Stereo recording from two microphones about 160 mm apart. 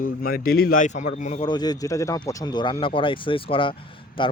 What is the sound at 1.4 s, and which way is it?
Speech, 25° left (ahead or behind).